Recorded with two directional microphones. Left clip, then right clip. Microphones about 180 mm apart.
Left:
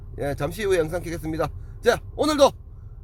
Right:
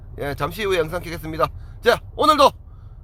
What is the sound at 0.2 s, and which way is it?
A man's voice, 5° left (ahead or behind).